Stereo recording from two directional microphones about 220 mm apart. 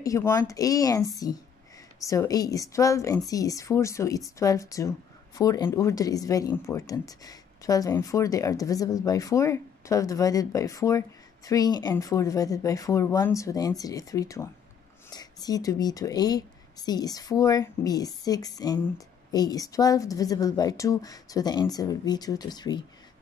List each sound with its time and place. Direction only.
0.0 s speech: 15° left (ahead or behind)